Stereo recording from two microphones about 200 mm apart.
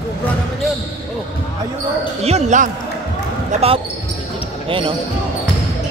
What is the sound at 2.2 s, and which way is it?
Speech, 35° right (ahead or behind).